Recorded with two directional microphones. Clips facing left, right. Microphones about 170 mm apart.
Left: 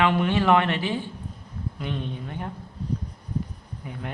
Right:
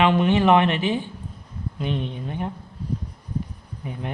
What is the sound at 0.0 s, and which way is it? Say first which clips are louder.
Speech: right 3 dB; 20° right (ahead or behind).